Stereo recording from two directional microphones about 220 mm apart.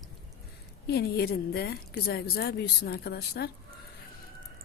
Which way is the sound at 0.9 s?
45° left (ahead or behind).